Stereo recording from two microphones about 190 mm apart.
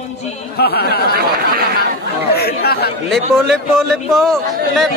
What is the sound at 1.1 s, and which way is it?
Speech, 55° right (ahead or behind).